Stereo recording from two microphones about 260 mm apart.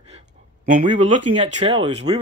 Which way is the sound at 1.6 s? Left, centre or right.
Right.